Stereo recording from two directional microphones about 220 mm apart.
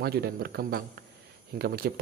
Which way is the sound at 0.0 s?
45° right (ahead or behind).